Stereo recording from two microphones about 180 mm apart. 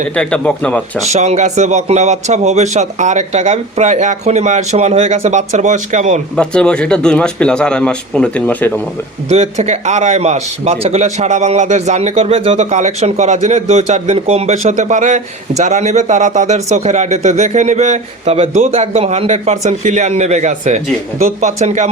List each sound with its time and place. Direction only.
0.2 s a man's voice: 5° left (ahead or behind)
1.0 s a man's voice: 40° right (ahead or behind)
6.3 s a man's voice: 5° left (ahead or behind)
9.3 s a man's voice: 40° right (ahead or behind)